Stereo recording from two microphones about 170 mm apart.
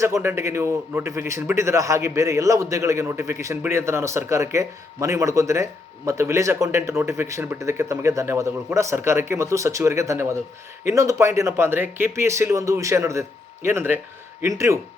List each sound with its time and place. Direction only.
0.0 s a man's voice: 15° right (ahead or behind)